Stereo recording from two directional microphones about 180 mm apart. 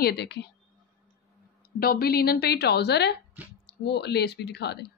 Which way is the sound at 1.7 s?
55° left (ahead or behind).